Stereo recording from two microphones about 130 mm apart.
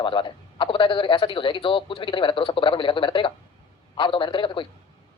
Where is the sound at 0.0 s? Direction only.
40° left (ahead or behind).